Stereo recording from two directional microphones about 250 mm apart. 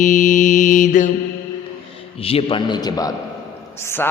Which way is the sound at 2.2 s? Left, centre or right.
Left.